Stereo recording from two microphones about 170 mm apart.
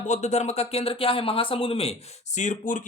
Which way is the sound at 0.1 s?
40° left (ahead or behind).